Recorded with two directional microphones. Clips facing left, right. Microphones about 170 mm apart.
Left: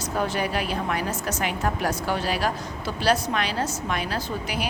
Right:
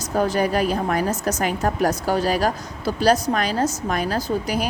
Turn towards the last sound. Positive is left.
turn(degrees=-40)  # may be behind; listen again after turning